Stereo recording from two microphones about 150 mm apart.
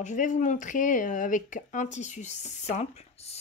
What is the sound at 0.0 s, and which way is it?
Speech, 55° left (ahead or behind).